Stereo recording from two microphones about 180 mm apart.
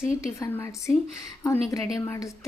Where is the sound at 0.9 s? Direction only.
5° left (ahead or behind).